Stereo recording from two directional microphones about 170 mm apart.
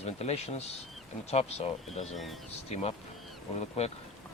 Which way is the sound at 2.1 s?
Centre (ahead or behind).